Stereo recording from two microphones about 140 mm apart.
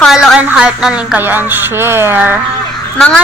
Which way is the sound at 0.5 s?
5° right (ahead or behind).